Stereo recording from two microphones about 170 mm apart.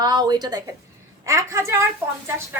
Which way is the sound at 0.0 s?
25° right (ahead or behind).